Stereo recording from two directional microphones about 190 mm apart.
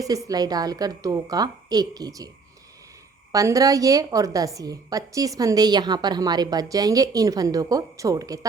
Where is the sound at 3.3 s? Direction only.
20° right (ahead or behind).